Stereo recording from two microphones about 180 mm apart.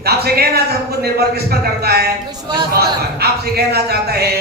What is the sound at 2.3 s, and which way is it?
Speech, 20° right (ahead or behind).